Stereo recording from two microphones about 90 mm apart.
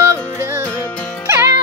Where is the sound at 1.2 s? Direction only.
30° right (ahead or behind).